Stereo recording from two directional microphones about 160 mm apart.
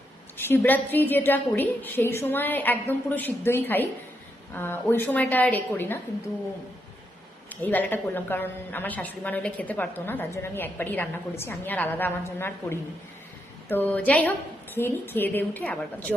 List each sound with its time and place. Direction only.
0.3 s a woman's voice: 15° left (ahead or behind)
7.5 s a woman's voice: 10° left (ahead or behind)